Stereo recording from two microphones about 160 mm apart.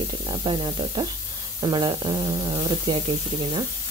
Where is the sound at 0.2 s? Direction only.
25° right (ahead or behind).